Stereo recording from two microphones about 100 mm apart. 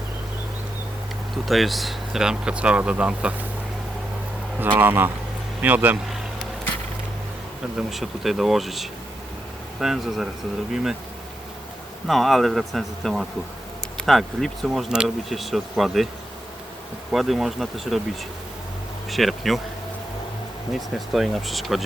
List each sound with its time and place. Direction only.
1.5 s speech: centre (ahead or behind)
4.8 s speech: 20° right (ahead or behind)
7.8 s speech: centre (ahead or behind)
12.0 s speech: centre (ahead or behind)
17.1 s speech: centre (ahead or behind)
19.1 s speech: centre (ahead or behind)
20.7 s speech: centre (ahead or behind)